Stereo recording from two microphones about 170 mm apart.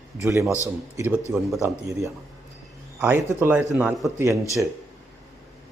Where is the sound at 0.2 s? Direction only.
15° right (ahead or behind).